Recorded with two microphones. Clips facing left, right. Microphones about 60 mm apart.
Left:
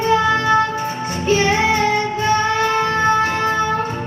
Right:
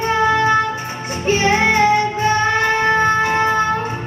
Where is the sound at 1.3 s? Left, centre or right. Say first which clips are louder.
Right 1 dB; right.